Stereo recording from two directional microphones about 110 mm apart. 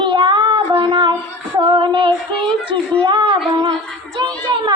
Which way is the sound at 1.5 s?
45° right (ahead or behind).